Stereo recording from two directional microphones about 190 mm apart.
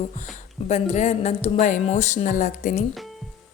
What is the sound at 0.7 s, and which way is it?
Speech, 35° left (ahead or behind).